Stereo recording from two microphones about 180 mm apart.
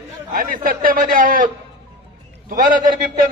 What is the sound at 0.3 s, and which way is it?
A man's voice, 50° right (ahead or behind).